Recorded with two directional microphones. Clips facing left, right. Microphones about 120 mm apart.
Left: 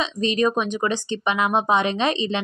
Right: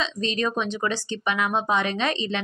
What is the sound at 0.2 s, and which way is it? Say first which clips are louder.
Speech: left 6 dB; 15° left (ahead or behind).